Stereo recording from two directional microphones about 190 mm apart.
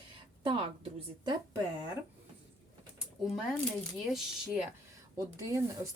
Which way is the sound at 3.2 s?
Centre (ahead or behind).